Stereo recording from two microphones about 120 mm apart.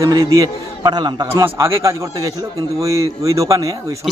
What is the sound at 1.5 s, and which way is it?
A man's voice, 25° right (ahead or behind).